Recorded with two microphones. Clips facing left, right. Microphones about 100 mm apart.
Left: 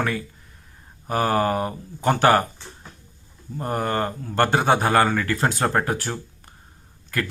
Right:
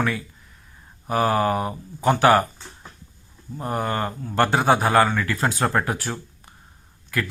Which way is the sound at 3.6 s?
40° left (ahead or behind).